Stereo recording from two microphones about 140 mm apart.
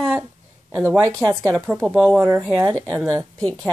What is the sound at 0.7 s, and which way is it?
A woman's voice, 15° right (ahead or behind).